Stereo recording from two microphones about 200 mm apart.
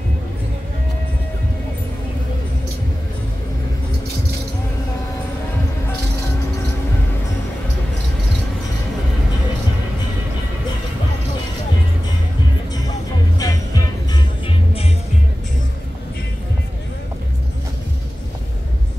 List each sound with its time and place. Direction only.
13.4 s music: 15° left (ahead or behind)
14.4 s music: 30° left (ahead or behind)